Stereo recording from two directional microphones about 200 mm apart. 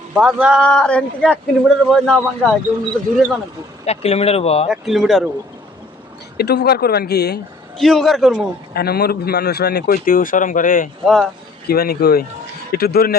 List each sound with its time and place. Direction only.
0.1 s speech: 5° right (ahead or behind)
3.8 s speech: 30° left (ahead or behind)
4.7 s speech: centre (ahead or behind)
6.3 s speech: 55° left (ahead or behind)
7.8 s speech: centre (ahead or behind)
8.7 s speech: 50° left (ahead or behind)
11.0 s speech: centre (ahead or behind)
11.7 s speech: 50° left (ahead or behind)